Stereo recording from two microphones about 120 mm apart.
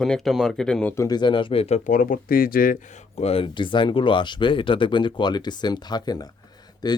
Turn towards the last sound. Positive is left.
turn(degrees=35)  # may be behind; listen again after turning